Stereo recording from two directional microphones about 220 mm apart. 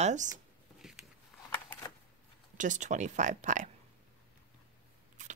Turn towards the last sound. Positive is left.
turn(degrees=-35)  # may be behind; listen again after turning